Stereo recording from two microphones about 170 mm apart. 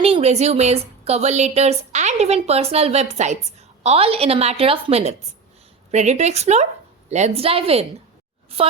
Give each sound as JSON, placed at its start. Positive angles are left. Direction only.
{"t": 0.0, "sound": "speech", "side_deg": -35}